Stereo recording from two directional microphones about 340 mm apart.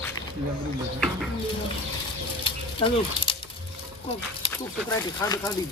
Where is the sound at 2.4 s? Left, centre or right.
Centre.